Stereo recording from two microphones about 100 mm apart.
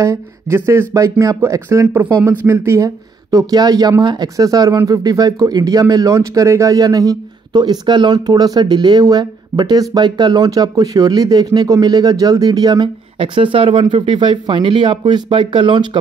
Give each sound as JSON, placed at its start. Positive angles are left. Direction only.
{"t": 0.0, "sound": "speech", "side_deg": -30}